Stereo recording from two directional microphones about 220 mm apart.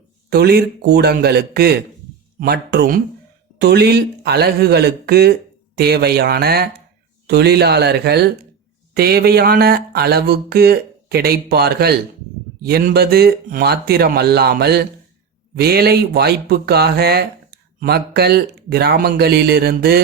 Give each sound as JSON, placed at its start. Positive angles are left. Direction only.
{"t": 0.3, "sound": "speech", "side_deg": -45}